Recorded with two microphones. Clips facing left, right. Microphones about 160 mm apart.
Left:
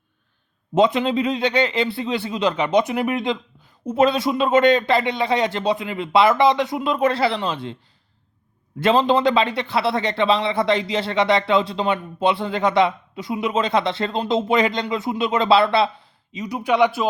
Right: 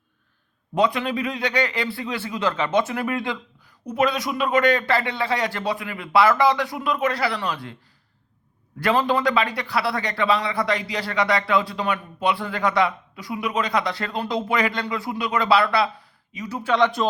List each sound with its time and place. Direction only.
0.7 s speech: 20° left (ahead or behind)
8.8 s speech: 20° left (ahead or behind)